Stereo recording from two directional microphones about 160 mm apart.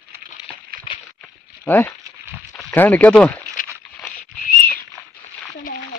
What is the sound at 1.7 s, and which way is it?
Speech, 15° left (ahead or behind).